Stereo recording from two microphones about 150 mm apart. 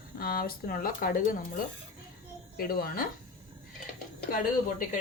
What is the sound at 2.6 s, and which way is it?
Speech, 90° left.